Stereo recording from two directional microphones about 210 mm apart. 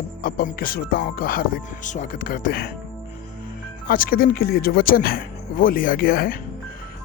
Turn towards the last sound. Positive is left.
turn(degrees=45)  # may be behind; listen again after turning